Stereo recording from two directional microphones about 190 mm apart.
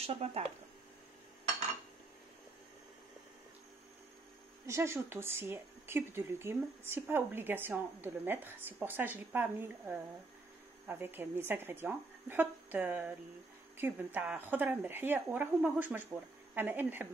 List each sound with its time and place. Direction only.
0.0 s speech: 30° right (ahead or behind)
4.6 s speech: 15° right (ahead or behind)